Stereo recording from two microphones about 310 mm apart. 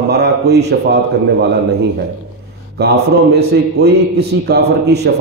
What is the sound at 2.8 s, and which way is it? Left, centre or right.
A man's voice, right.